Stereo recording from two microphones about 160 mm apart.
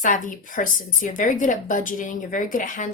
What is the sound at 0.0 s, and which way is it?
A woman's voice, 55° left (ahead or behind).